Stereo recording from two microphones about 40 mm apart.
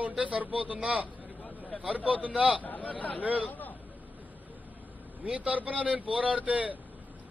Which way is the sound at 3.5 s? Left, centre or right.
Left.